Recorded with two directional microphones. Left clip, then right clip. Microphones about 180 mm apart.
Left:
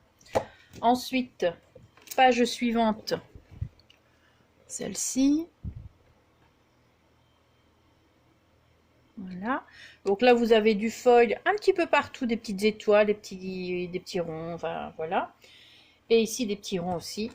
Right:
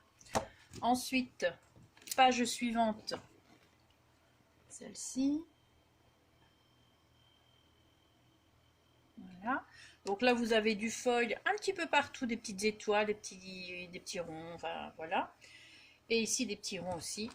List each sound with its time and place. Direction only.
0.8 s speech: 35° left (ahead or behind)
4.8 s speech: 50° left (ahead or behind)
9.4 s speech: 40° left (ahead or behind)